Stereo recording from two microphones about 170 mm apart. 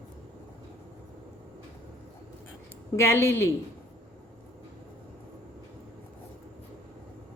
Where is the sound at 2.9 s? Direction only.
15° left (ahead or behind).